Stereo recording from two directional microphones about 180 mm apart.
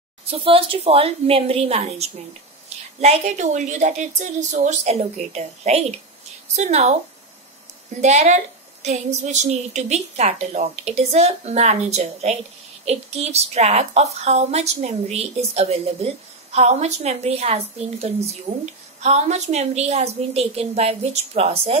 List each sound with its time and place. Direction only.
0.3 s a woman's voice: 30° right (ahead or behind)
8.0 s a woman's voice: 40° right (ahead or behind)